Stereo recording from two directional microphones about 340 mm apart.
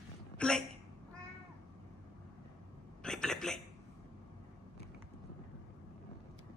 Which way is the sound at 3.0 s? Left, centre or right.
Centre.